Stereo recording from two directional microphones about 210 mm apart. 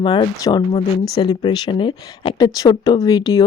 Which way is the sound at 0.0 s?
25° left (ahead or behind).